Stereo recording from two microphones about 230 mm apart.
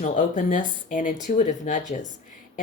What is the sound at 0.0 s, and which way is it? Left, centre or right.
Speech, left.